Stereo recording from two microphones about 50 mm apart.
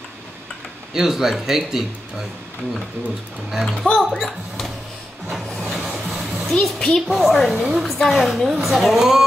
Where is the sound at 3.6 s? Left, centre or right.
Centre.